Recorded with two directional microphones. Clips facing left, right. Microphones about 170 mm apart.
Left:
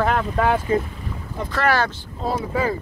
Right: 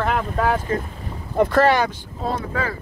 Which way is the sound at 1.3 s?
60° right (ahead or behind).